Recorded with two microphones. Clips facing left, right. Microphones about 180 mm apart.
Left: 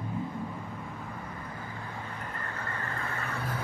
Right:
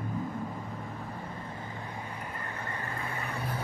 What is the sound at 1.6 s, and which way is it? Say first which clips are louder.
Vehicle: even; 20° right (ahead or behind).